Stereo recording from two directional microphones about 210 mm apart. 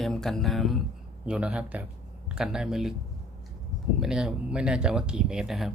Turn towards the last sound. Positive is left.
turn(degrees=0)  # may be behind; listen again after turning